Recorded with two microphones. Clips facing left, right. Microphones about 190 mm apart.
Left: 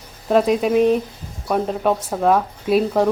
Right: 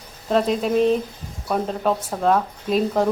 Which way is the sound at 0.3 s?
5° left (ahead or behind).